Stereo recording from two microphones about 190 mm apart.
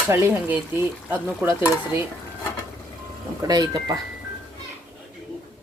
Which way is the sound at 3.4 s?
20° right (ahead or behind).